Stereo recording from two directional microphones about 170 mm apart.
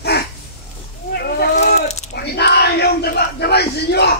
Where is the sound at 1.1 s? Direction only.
70° left (ahead or behind).